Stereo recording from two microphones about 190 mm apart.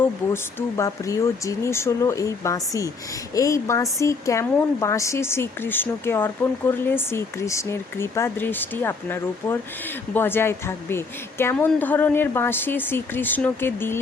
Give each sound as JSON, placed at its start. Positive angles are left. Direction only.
{"t": 0.8, "sound": "speech", "side_deg": 15}